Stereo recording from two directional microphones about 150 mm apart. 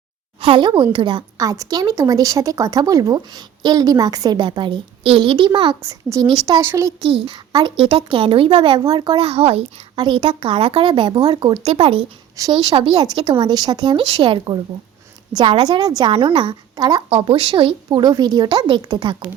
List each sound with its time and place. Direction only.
0.4 s a woman's voice: 30° right (ahead or behind)
5.8 s a woman's voice: 20° right (ahead or behind)
6.2 s a woman's voice: 35° right (ahead or behind)
6.7 s a woman's voice: 20° right (ahead or behind)
7.0 s a woman's voice: 40° right (ahead or behind)
8.8 s a woman's voice: 25° right (ahead or behind)
9.1 s a woman's voice: 40° right (ahead or behind)
17.1 s a woman's voice: 40° right (ahead or behind)